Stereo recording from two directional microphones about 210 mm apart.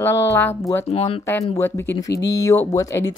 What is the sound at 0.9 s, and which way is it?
Speech, 30° left (ahead or behind).